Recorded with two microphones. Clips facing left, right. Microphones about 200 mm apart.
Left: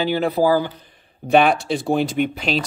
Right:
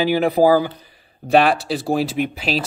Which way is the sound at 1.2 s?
Centre (ahead or behind).